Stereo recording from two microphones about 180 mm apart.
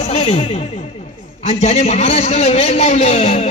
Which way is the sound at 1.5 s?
40° left (ahead or behind).